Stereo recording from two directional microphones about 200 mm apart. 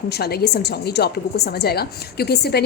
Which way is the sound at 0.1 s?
50° left (ahead or behind).